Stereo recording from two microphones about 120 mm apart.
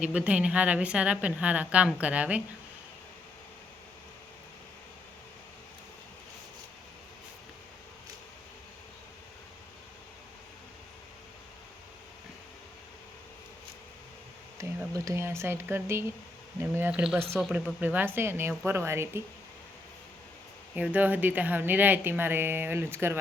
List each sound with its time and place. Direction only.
0.0 s a woman's voice: 10° right (ahead or behind)
14.6 s a sound: 25° right (ahead or behind)
14.9 s a woman's voice: 25° right (ahead or behind)
16.9 s a woman's voice: 5° right (ahead or behind)
20.7 s a woman's voice: 15° right (ahead or behind)